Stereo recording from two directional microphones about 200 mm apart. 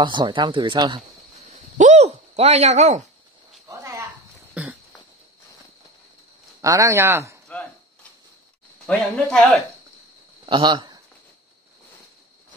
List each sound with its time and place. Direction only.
0.0 s speech: 25° right (ahead or behind)
1.8 s a sound: 35° right (ahead or behind)
3.6 s a sound: 15° right (ahead or behind)
6.6 s speech: 15° right (ahead or behind)
8.8 s speech: 5° left (ahead or behind)
10.4 s speech: 25° right (ahead or behind)